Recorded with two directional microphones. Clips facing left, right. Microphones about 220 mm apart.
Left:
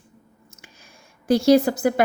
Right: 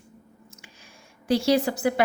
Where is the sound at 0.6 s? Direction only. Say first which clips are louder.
Left 1 dB; 45° left (ahead or behind).